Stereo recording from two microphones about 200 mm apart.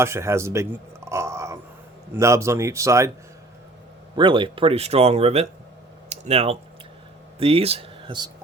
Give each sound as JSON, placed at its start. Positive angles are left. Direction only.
{"t": 0.0, "sound": "speech", "side_deg": -15}
{"t": 4.1, "sound": "speech", "side_deg": -25}